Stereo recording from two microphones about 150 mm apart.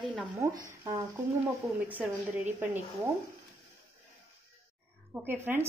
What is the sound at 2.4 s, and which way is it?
Speech, 15° right (ahead or behind).